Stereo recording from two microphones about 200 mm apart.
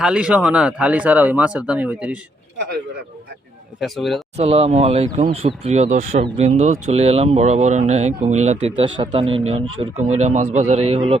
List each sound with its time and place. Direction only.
0.0 s speech: 5° right (ahead or behind)
3.8 s speech: centre (ahead or behind)
4.4 s speech: 30° right (ahead or behind)